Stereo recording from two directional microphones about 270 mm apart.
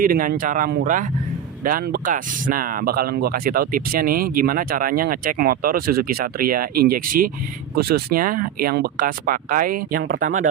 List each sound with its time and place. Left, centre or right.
0.0 s speech: right